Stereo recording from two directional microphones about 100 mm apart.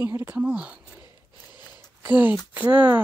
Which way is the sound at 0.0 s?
25° right (ahead or behind).